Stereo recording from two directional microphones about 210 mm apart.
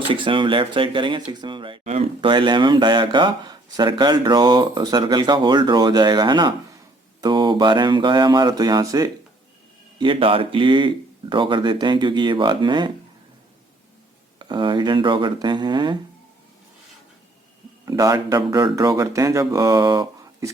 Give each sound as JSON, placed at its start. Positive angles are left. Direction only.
{"t": 0.1, "sound": "speech", "side_deg": -25}
{"t": 14.3, "sound": "speech", "side_deg": -20}
{"t": 17.8, "sound": "speech", "side_deg": -20}